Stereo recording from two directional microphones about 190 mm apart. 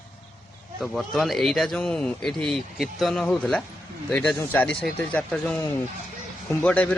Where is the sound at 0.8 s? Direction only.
Centre (ahead or behind).